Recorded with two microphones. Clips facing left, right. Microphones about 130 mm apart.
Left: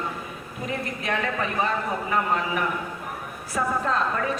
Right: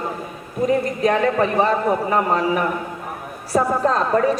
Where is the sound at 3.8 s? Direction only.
35° right (ahead or behind).